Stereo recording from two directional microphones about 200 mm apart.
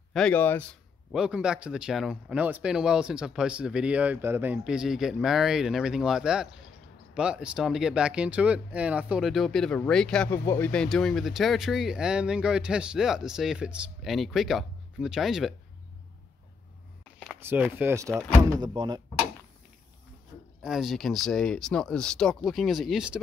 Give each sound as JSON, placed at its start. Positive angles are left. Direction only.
{"t": 0.1, "sound": "a man's voice", "side_deg": 5}
{"t": 1.1, "sound": "speech", "side_deg": -5}
{"t": 10.4, "sound": "a man's voice", "side_deg": 15}
{"t": 10.7, "sound": "speech", "side_deg": 5}
{"t": 17.4, "sound": "speech", "side_deg": -10}
{"t": 20.6, "sound": "speech", "side_deg": 0}